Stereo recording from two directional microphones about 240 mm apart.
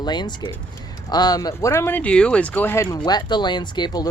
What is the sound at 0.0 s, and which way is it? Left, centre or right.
Speech, centre.